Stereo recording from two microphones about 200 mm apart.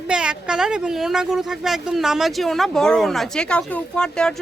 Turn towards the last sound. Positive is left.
turn(degrees=5)  # may be behind; listen again after turning